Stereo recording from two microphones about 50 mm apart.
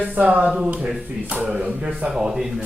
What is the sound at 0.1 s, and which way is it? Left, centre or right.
Speech, right.